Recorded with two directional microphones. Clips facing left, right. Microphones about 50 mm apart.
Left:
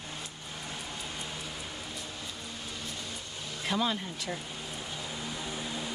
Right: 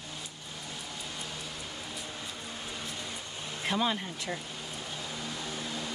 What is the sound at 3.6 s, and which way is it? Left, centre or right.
Speech, centre.